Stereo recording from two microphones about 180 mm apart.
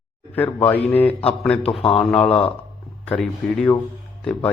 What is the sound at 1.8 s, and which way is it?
Speech, 30° left (ahead or behind).